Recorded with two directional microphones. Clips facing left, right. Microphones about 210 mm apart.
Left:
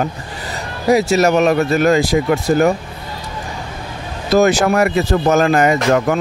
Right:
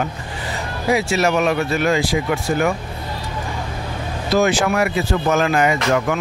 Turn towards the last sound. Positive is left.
turn(degrees=40)  # may be behind; listen again after turning